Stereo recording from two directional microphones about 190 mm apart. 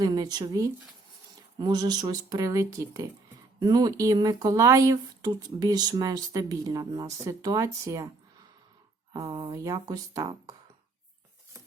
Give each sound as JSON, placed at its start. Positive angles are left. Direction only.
{"t": 0.0, "sound": "speech", "side_deg": -20}
{"t": 9.1, "sound": "speech", "side_deg": -20}